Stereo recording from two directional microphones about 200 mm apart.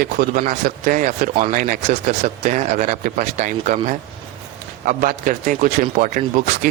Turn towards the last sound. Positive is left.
turn(degrees=-40)  # may be behind; listen again after turning